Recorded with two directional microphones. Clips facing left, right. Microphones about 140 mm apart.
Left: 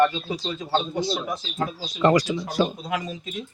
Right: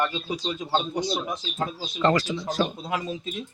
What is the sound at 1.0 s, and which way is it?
Speech, 15° right (ahead or behind).